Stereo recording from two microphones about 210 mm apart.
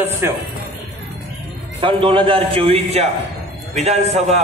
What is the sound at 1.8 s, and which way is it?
A man's voice, 25° right (ahead or behind).